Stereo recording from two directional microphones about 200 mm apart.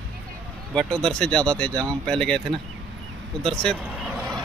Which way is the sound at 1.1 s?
5° left (ahead or behind).